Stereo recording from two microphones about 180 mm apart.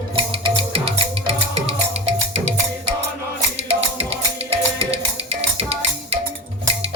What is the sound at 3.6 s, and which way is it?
Music, 35° right (ahead or behind).